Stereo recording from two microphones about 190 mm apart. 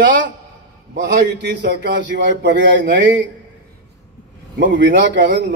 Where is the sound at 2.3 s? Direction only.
70° right (ahead or behind).